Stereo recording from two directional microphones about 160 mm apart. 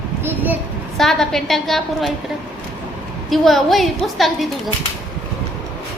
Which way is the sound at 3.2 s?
Centre (ahead or behind).